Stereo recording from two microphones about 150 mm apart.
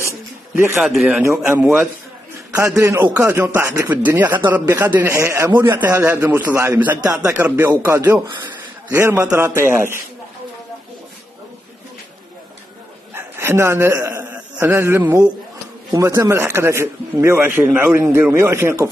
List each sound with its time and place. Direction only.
0.7 s a man's voice: centre (ahead or behind)
1.0 s a man's voice: 15° right (ahead or behind)
7.0 s speech: 25° right (ahead or behind)
7.2 s a man's voice: 10° right (ahead or behind)
13.1 s a man's voice: 15° right (ahead or behind)